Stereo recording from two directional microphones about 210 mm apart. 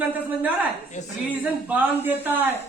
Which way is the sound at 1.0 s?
35° left (ahead or behind).